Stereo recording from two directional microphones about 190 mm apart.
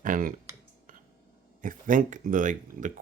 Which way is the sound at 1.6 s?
45° right (ahead or behind).